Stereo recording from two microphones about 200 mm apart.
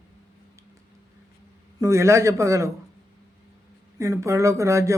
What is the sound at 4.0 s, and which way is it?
Speech, 15° right (ahead or behind).